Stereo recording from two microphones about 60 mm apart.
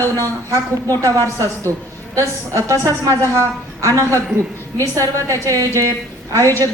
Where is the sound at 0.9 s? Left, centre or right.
Right.